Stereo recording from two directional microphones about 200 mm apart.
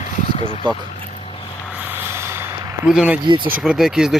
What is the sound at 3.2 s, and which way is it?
Speech, 25° right (ahead or behind).